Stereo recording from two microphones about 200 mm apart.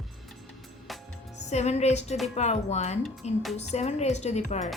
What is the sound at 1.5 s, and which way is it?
A woman's voice, 35° left (ahead or behind).